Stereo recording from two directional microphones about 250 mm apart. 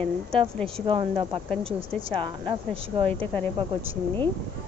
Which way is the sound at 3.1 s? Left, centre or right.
Centre.